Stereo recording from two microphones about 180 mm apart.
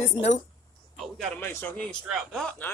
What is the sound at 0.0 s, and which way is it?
Speech, 40° left (ahead or behind).